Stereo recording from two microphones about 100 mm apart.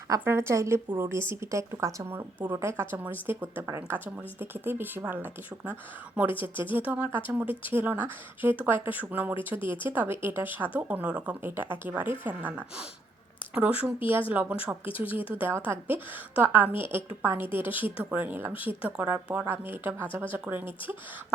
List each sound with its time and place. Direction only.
0.3 s speech: 25° right (ahead or behind)
14.8 s speech: 65° left (ahead or behind)
15.4 s speech: 20° right (ahead or behind)